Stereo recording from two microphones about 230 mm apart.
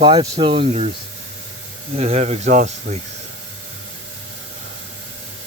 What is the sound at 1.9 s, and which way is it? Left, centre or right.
Speech, right.